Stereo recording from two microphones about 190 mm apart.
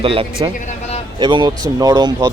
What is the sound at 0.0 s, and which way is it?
Speech, 30° right (ahead or behind).